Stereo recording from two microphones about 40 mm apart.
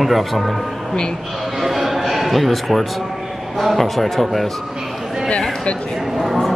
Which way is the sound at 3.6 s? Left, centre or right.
Centre.